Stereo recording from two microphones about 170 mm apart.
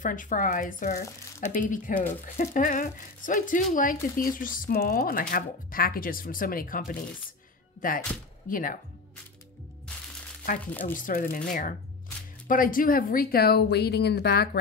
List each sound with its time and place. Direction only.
0.0 s speech: 50° left (ahead or behind)
10.6 s speech: 10° left (ahead or behind)
10.9 s speech: 50° left (ahead or behind); by 14.6 s 75° left (ahead or behind)